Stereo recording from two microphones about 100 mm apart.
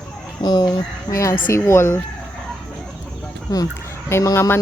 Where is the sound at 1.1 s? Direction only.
30° left (ahead or behind).